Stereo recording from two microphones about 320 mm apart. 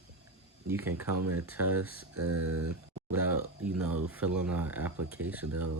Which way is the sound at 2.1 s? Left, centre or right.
Right.